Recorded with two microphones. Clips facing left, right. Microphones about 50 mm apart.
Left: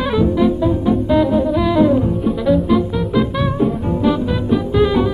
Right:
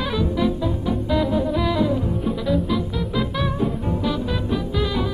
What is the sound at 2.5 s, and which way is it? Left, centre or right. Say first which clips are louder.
Music: left 9 dB; centre.